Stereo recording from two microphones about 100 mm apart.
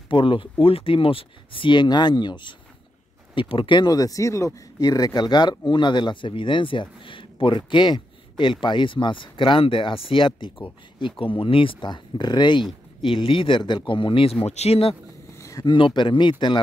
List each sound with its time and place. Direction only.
0.1 s speech: 60° left (ahead or behind)
3.9 s speech: 35° left (ahead or behind); by 14.3 s 60° left (ahead or behind)
14.4 s speech: 90° left
15.3 s a sound: 30° left (ahead or behind)
15.6 s speech: 50° left (ahead or behind)